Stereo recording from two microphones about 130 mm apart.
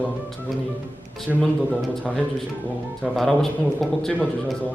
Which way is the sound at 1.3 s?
5° right (ahead or behind).